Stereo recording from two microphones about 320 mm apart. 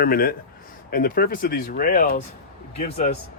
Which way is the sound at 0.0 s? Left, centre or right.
Left.